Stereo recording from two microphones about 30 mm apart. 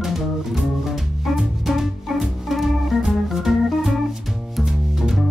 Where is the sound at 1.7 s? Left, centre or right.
Centre.